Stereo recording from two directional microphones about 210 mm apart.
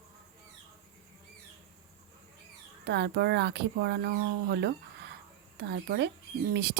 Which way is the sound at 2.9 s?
55° right (ahead or behind).